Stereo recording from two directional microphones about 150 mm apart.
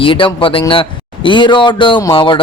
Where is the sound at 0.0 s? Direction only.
35° left (ahead or behind).